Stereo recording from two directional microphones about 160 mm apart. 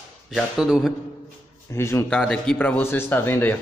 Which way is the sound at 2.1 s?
5° left (ahead or behind).